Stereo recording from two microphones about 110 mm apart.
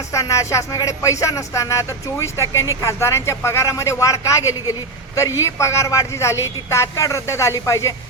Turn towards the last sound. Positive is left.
turn(degrees=25)  # may be behind; listen again after turning